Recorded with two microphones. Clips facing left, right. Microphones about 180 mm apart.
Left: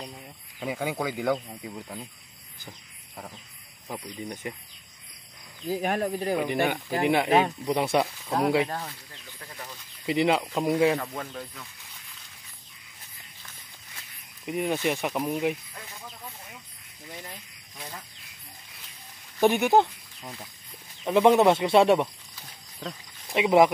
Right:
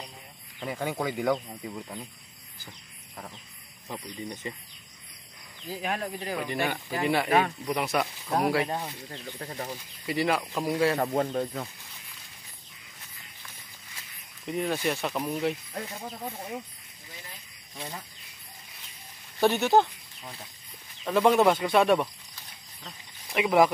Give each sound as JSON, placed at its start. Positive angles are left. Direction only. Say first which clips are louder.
{"t": 0.6, "sound": "speech", "louder": "left 1 dB", "side_deg": 5}
{"t": 3.9, "sound": "speech", "louder": "left 1 dB", "side_deg": 10}
{"t": 5.7, "sound": "speech", "louder": "left 6 dB", "side_deg": 40}
{"t": 6.3, "sound": "speech", "louder": "left 2 dB", "side_deg": 15}
{"t": 8.6, "sound": "speech", "louder": "right 2 dB", "side_deg": -15}
{"t": 9.1, "sound": "speech", "louder": "right 8 dB", "side_deg": -40}
{"t": 10.0, "sound": "speech", "louder": "left 3 dB", "side_deg": 20}
{"t": 11.0, "sound": "speech", "louder": "right 8 dB", "side_deg": -35}
{"t": 11.3, "sound": "speech", "louder": "right 9 dB", "side_deg": -50}
{"t": 14.4, "sound": "speech", "louder": "left 2 dB", "side_deg": 10}
{"t": 15.7, "sound": "speech", "louder": "right 7 dB", "side_deg": -40}
{"t": 19.4, "sound": "speech", "louder": "left 2 dB", "side_deg": 15}
{"t": 21.0, "sound": "speech", "louder": "left 2 dB", "side_deg": 20}
{"t": 23.3, "sound": "speech", "louder": "left 3 dB", "side_deg": 20}